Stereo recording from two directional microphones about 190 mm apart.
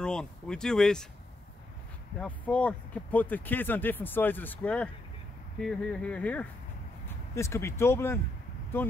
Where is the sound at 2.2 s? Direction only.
5° left (ahead or behind).